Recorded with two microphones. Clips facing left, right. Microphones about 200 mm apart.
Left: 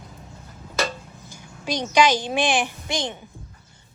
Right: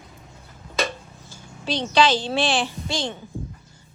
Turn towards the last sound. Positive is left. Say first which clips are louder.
# right 1 dB
turn(degrees=15)  # may be behind; listen again after turning